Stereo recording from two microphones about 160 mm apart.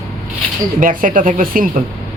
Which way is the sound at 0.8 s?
55° right (ahead or behind).